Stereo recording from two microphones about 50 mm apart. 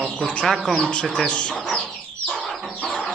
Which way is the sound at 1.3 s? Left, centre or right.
Left.